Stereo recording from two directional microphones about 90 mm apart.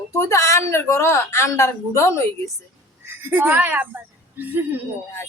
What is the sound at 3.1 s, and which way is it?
A woman's voice, 25° right (ahead or behind).